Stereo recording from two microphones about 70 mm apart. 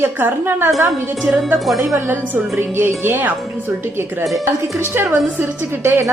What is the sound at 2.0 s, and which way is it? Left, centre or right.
Speech, right.